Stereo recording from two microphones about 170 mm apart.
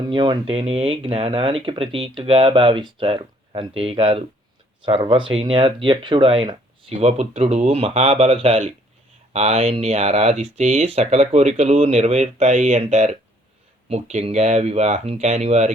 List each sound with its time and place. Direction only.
0.1 s speech: 30° right (ahead or behind)
6.9 s speech: 40° right (ahead or behind)